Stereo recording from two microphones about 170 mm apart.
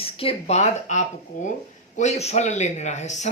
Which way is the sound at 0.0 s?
35° left (ahead or behind).